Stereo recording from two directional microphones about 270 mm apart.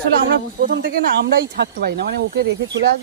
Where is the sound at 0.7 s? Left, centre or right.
Right.